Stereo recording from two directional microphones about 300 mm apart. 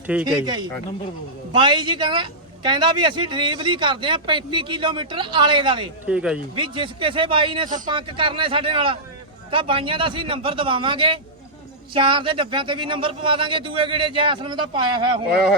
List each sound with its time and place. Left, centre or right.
0.1 s a man's voice: centre
6.1 s speech: centre
6.6 s a man's voice: centre